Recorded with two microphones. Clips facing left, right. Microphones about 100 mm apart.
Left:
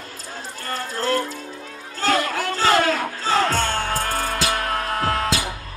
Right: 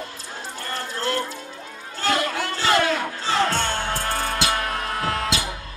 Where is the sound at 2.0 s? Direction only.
40° left (ahead or behind).